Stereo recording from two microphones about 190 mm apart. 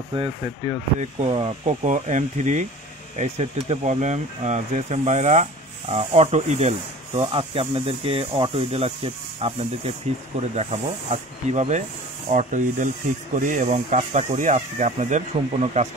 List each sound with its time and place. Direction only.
0.1 s speech: 25° right (ahead or behind)